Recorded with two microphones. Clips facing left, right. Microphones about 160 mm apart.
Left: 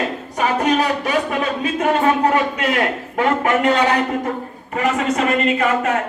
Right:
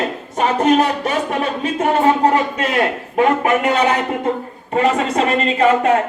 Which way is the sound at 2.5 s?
25° right (ahead or behind).